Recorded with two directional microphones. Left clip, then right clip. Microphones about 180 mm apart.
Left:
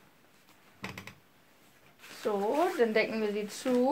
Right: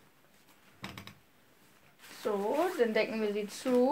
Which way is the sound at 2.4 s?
5° left (ahead or behind).